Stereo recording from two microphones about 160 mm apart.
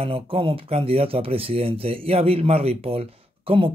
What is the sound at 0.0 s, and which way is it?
Speech, 35° right (ahead or behind).